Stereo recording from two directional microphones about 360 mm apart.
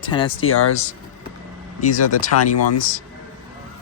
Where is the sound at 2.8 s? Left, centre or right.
Left.